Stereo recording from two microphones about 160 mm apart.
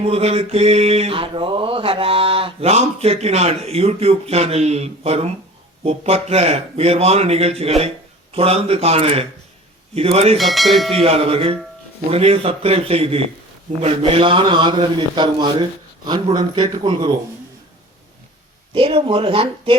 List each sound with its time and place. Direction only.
0.0 s mantra: 40° right (ahead or behind)
10.3 s speech: centre (ahead or behind)
11.0 s mantra: 35° right (ahead or behind)
16.0 s a man's voice: 25° right (ahead or behind)
18.7 s mantra: 35° right (ahead or behind)